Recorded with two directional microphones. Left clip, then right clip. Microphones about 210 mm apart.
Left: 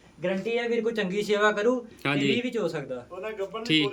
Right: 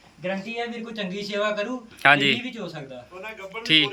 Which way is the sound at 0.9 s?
20° left (ahead or behind).